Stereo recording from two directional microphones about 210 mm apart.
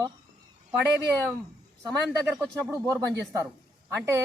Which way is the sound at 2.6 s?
15° right (ahead or behind).